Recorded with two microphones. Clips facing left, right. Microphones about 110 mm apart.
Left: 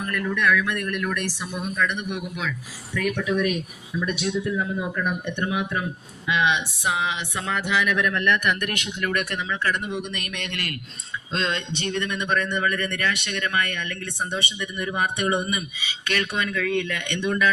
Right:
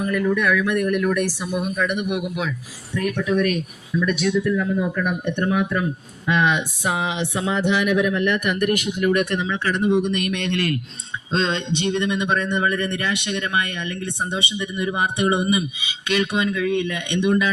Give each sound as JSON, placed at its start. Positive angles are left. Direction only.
{"t": 0.0, "sound": "speech", "side_deg": -10}
{"t": 3.0, "sound": "speech", "side_deg": -40}
{"t": 3.9, "sound": "speech", "side_deg": 40}
{"t": 4.3, "sound": "speech", "side_deg": 25}
{"t": 4.5, "sound": "speech", "side_deg": 10}
{"t": 6.2, "sound": "speech", "side_deg": -45}
{"t": 9.3, "sound": "speech", "side_deg": -25}